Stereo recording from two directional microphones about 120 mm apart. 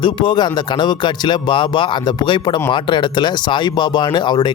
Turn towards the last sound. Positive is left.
turn(degrees=40)  # may be behind; listen again after turning